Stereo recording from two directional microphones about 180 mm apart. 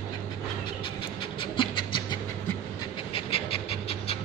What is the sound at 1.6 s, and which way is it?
Pant, 25° left (ahead or behind).